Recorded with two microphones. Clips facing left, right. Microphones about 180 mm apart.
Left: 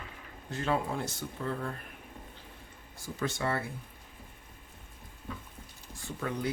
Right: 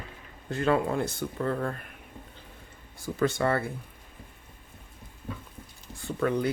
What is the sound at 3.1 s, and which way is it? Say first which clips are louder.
Speech: right 7 dB; 60° right (ahead or behind).